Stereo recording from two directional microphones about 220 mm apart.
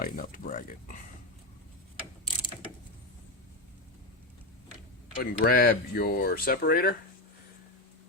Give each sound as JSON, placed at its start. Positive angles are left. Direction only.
{"t": 0.0, "sound": "speech", "side_deg": 40}
{"t": 5.2, "sound": "speech", "side_deg": 45}